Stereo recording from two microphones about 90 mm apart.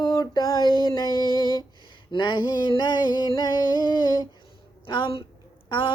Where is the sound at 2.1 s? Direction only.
60° left (ahead or behind).